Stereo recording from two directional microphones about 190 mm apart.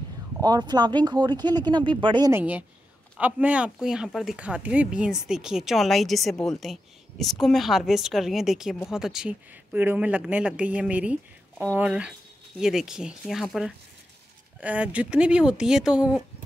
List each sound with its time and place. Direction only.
0.4 s speech: 20° right (ahead or behind)
3.2 s speech: 10° right (ahead or behind)